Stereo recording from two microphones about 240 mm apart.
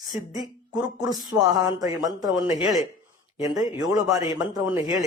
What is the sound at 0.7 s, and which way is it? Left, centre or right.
Speech, centre.